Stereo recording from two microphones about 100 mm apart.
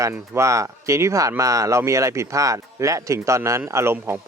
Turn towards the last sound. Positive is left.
turn(degrees=-25)  # may be behind; listen again after turning